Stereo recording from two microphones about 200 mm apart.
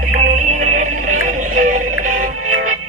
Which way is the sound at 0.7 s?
40° right (ahead or behind).